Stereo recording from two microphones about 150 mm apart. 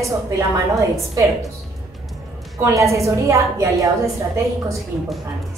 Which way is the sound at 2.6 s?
20° right (ahead or behind).